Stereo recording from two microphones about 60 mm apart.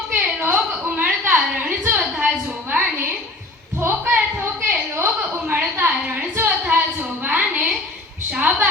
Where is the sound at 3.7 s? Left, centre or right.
Right.